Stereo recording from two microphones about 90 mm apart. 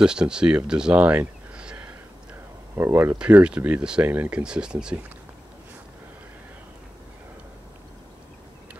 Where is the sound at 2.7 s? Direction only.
25° right (ahead or behind).